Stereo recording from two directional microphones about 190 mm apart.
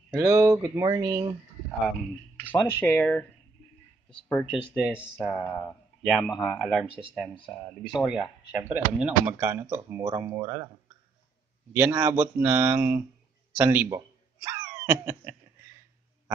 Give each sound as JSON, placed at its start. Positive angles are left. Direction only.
{"t": 0.1, "sound": "speech", "side_deg": -15}
{"t": 2.4, "sound": "speech", "side_deg": 10}
{"t": 8.0, "sound": "speech", "side_deg": 0}
{"t": 11.7, "sound": "speech", "side_deg": -15}
{"t": 13.6, "sound": "a sound", "side_deg": -10}